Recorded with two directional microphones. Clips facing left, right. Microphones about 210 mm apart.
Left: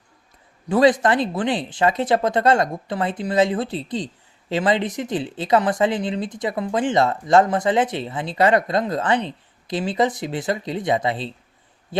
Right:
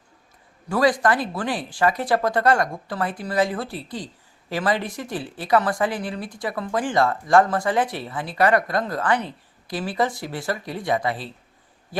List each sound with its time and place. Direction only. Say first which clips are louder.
0.7 s speech: left 4 dB; 20° left (ahead or behind)